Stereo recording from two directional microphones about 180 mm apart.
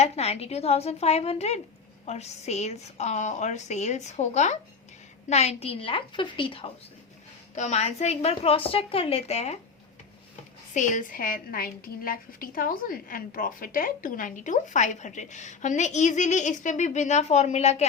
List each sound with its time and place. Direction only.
0.0 s a woman's voice: 35° left (ahead or behind)
7.5 s a woman's voice: 40° left (ahead or behind)
10.8 s a woman's voice: 45° left (ahead or behind)